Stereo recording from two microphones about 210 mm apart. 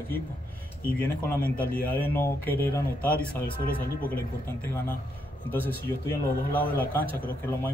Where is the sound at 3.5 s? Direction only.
45° left (ahead or behind).